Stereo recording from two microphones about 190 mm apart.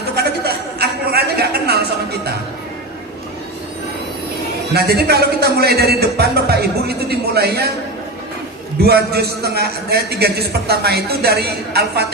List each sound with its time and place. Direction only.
0.2 s a sound: 55° right (ahead or behind)
4.7 s a man's voice: 55° right (ahead or behind)
8.8 s a man's voice: 60° right (ahead or behind)